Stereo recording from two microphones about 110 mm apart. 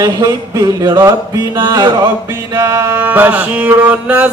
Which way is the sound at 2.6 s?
25° right (ahead or behind).